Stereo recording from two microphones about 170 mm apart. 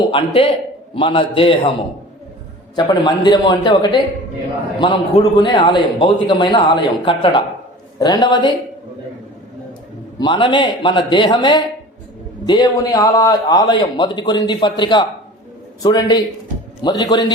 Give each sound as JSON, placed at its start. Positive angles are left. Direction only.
{"t": 0.1, "sound": "a man's voice", "side_deg": 30}
{"t": 2.7, "sound": "a man's voice", "side_deg": 25}
{"t": 10.2, "sound": "a man's voice", "side_deg": 30}